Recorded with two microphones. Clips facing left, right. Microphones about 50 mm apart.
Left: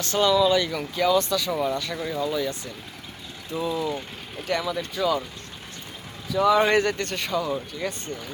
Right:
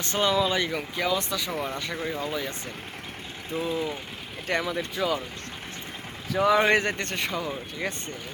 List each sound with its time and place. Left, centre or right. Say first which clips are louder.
0.0 s speech: left 4 dB; right
6.5 s speech: left 2 dB; centre